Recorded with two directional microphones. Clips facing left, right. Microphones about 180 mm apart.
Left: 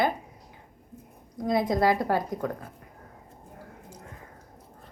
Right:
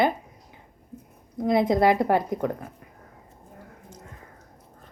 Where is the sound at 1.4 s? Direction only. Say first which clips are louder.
Right 4 dB; 25° right (ahead or behind).